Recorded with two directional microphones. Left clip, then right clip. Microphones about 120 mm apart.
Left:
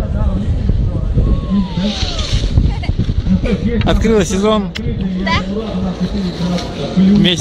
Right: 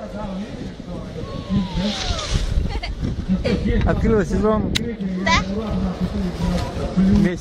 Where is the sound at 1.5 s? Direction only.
25° right (ahead or behind).